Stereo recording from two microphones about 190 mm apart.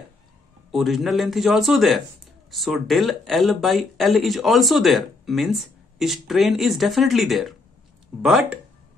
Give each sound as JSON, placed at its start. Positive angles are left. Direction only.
{"t": 0.7, "sound": "speech", "side_deg": 0}